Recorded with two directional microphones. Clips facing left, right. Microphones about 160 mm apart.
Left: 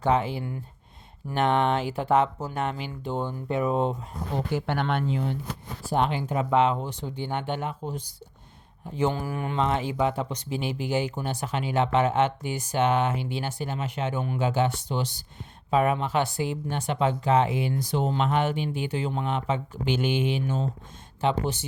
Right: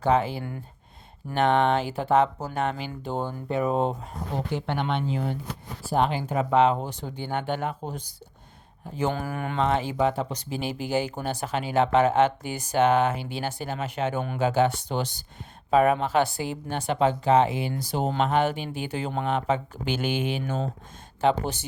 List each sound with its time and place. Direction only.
0.1 s speech: 35° right (ahead or behind)
4.4 s speech: centre (ahead or behind)
5.1 s speech: 45° right (ahead or behind)
9.0 s speech: 50° right (ahead or behind)
9.6 s speech: 35° right (ahead or behind)
14.9 s speech: 55° right (ahead or behind)
15.7 s speech: 40° right (ahead or behind)